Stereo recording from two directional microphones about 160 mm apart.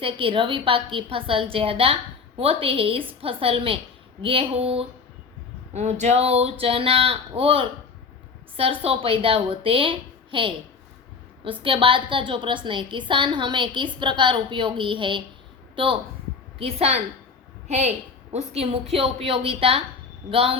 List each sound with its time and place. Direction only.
0.0 s a woman's voice: 35° right (ahead or behind)